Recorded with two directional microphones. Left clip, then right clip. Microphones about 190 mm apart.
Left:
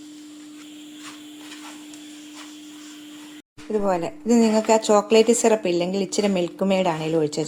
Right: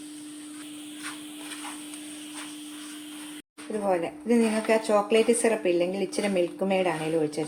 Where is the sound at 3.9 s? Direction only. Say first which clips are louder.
Left 2 dB; 45° left (ahead or behind).